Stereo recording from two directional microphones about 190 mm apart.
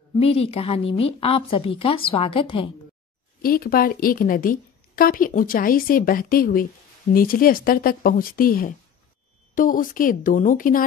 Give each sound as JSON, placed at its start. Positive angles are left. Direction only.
{"t": 0.2, "sound": "speech", "side_deg": 30}
{"t": 3.4, "sound": "a woman's voice", "side_deg": 50}